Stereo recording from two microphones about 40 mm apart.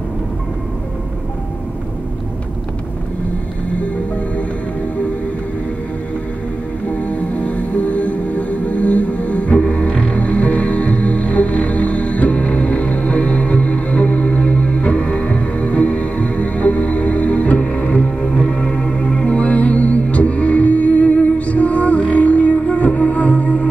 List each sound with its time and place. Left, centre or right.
7.0 s music: left